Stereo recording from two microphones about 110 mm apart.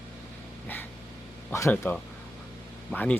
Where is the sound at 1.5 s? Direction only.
25° left (ahead or behind).